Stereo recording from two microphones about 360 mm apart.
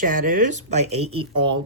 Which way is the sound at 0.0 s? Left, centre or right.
Right.